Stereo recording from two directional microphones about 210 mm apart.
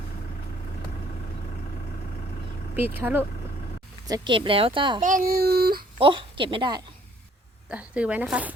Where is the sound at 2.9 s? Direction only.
10° right (ahead or behind).